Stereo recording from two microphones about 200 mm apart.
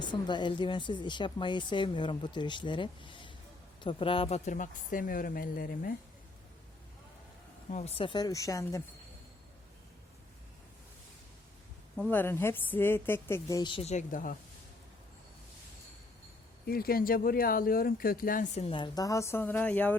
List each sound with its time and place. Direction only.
0.0 s speech: 20° left (ahead or behind); by 5.9 s 45° left (ahead or behind)
7.7 s speech: 35° left (ahead or behind); by 8.8 s 15° left (ahead or behind)
12.1 s a woman's voice: 10° left (ahead or behind); by 14.3 s 40° left (ahead or behind)
16.6 s speech: 45° left (ahead or behind); by 20.0 s 10° left (ahead or behind)